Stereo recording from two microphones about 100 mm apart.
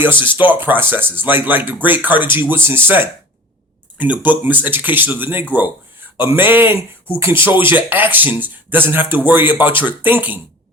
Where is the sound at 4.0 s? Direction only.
15° right (ahead or behind).